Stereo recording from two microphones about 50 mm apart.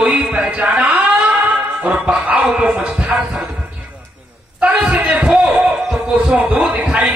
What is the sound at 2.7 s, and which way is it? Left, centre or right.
Speech, centre.